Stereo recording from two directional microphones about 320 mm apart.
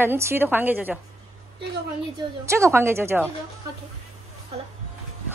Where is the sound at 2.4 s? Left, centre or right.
Centre.